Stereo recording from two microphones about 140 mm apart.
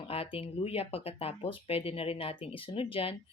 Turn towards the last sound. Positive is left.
turn(degrees=40)  # may be behind; listen again after turning